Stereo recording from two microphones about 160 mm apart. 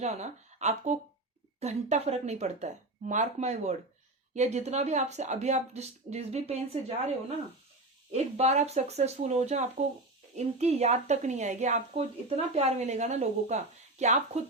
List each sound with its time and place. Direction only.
0.0 s speech: 45° right (ahead or behind)